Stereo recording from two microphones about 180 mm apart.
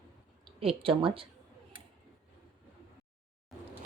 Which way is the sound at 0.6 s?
30° right (ahead or behind).